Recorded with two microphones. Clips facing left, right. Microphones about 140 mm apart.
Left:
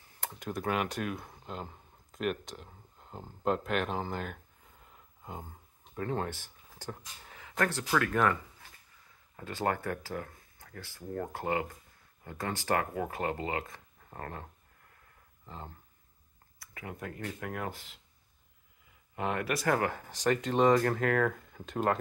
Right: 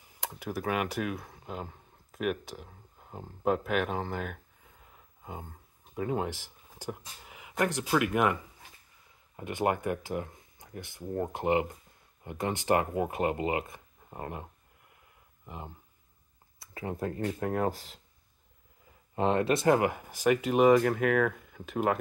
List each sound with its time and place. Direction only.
0.0 s speech: 10° right (ahead or behind)
9.4 s speech: 15° right (ahead or behind)
16.5 s speech: 30° right (ahead or behind)
19.1 s speech: 25° right (ahead or behind); by 21.9 s 5° right (ahead or behind)